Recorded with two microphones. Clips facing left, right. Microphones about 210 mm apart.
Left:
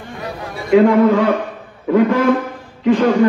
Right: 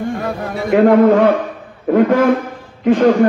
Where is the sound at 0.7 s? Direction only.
55° right (ahead or behind).